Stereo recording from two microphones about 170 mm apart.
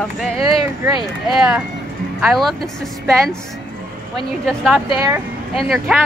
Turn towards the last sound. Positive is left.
turn(degrees=0)  # may be behind; listen again after turning